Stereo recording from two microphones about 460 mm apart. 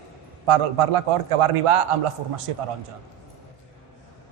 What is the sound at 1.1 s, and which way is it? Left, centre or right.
Speech, right.